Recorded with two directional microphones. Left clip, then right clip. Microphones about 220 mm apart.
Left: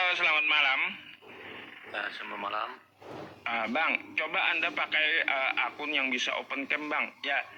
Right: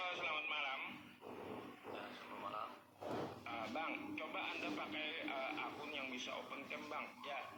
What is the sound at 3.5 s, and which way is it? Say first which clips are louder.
A man's voice: left 17 dB; 45° left (ahead or behind).